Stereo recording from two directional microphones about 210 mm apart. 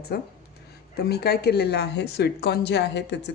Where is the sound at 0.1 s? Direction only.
50° left (ahead or behind).